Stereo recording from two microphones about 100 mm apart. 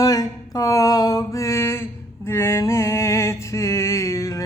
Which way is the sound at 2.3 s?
25° left (ahead or behind).